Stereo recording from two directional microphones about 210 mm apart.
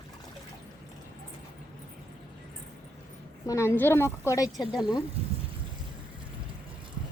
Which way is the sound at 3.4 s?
15° left (ahead or behind).